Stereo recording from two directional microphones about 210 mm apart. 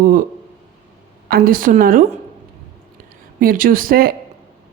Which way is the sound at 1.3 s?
40° right (ahead or behind).